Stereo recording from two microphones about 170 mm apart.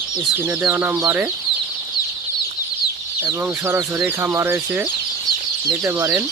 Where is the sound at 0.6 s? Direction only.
10° right (ahead or behind).